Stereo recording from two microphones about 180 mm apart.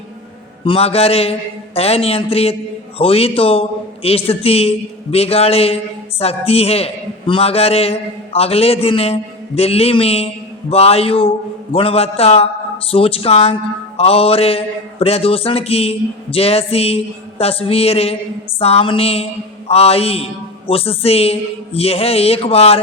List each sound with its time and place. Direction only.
0.6 s mantra: 30° left (ahead or behind)